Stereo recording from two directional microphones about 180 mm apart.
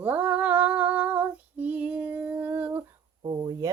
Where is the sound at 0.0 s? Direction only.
10° right (ahead or behind).